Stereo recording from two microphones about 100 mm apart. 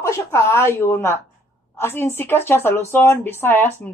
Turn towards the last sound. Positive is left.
turn(degrees=20)  # may be behind; listen again after turning